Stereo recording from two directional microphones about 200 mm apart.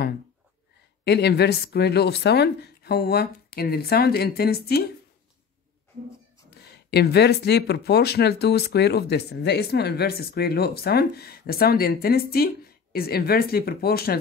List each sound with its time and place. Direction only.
1.0 s speech: 55° left (ahead or behind)
6.6 s speech: 55° left (ahead or behind)